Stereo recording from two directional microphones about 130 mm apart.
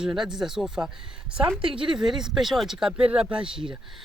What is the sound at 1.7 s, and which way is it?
Speech, 40° right (ahead or behind).